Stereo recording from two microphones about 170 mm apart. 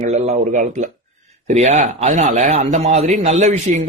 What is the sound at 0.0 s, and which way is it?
A man's voice, 40° right (ahead or behind).